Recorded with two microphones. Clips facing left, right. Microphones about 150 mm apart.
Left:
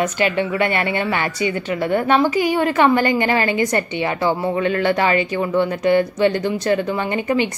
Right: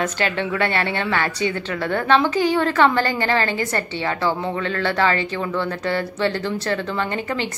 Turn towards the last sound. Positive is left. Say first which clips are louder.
# left 5 dB
turn(degrees=15)  # may be behind; listen again after turning